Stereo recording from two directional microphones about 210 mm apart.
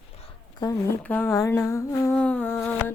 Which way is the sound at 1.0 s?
10° left (ahead or behind).